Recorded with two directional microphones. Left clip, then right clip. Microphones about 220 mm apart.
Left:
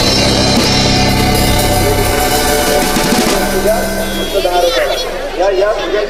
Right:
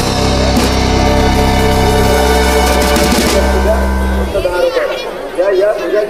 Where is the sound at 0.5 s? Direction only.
Centre (ahead or behind).